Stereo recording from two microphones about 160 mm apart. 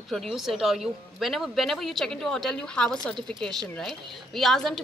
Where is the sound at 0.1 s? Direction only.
Centre (ahead or behind).